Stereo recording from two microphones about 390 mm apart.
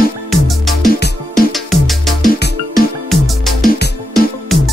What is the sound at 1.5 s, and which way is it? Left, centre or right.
Music, centre.